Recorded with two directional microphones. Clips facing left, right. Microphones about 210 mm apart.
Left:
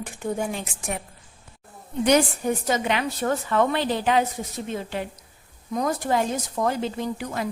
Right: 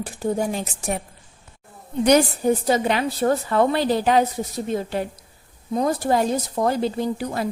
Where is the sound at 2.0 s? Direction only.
35° right (ahead or behind).